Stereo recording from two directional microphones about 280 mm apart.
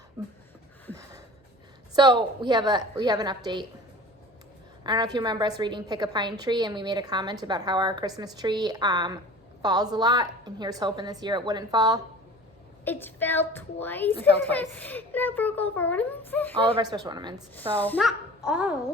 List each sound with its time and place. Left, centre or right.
2.0 s a woman's voice: centre
4.8 s a woman's voice: centre
12.8 s a child's voice: centre
16.7 s a woman's voice: centre
17.5 s speech: centre